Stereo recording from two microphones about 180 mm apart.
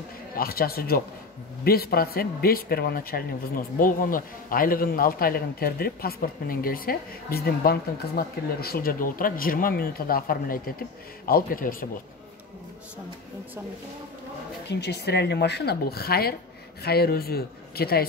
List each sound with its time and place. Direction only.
0.4 s a man's voice: 55° left (ahead or behind)
14.7 s a man's voice: 65° left (ahead or behind)